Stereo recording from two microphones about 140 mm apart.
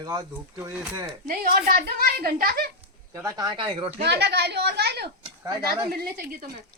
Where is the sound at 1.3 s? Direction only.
90° right.